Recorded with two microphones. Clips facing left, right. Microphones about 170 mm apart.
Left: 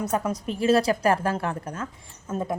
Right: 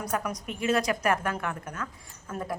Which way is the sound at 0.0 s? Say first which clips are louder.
Left 5 dB; 25° left (ahead or behind).